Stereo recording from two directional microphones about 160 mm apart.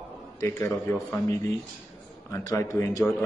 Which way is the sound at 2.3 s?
20° left (ahead or behind).